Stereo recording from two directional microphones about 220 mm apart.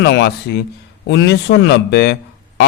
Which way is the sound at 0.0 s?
50° left (ahead or behind).